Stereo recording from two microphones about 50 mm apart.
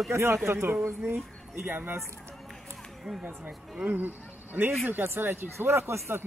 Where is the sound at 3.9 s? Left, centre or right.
Right.